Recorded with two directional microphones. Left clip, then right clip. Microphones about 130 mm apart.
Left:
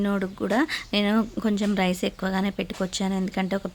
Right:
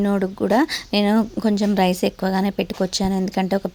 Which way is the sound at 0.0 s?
25° right (ahead or behind).